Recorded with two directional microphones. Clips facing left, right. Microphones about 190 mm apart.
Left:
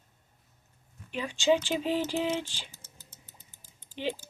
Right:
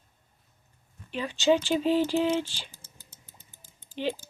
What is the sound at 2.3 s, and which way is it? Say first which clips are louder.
Speech: right 4 dB; 10° right (ahead or behind).